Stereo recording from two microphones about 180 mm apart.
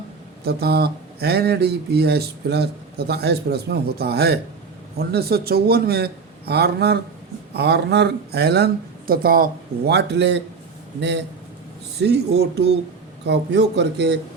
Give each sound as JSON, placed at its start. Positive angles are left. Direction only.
{"t": 0.4, "sound": "speech", "side_deg": -60}
{"t": 12.0, "sound": "a man's voice", "side_deg": -65}